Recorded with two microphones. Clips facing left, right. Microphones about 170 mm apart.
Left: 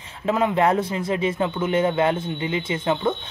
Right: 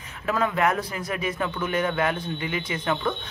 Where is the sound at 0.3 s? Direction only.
25° left (ahead or behind).